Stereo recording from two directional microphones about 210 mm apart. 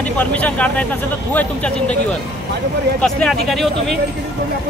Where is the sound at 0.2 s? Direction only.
5° left (ahead or behind).